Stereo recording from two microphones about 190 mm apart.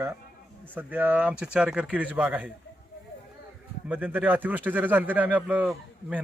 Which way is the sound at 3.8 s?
10° right (ahead or behind).